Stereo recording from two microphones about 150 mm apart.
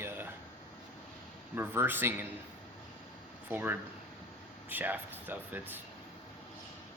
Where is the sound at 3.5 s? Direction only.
10° right (ahead or behind).